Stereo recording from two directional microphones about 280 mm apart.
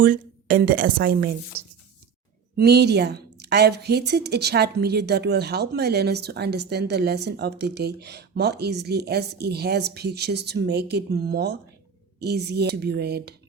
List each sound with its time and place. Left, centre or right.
0.0 s a woman's voice: right
2.6 s a woman's voice: right